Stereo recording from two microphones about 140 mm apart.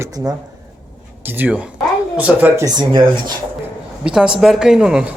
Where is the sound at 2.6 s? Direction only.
30° right (ahead or behind).